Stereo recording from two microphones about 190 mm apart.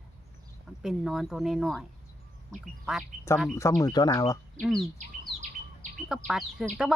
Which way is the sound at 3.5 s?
15° left (ahead or behind).